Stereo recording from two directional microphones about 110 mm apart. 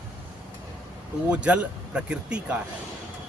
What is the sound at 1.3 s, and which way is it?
Speech, 10° right (ahead or behind).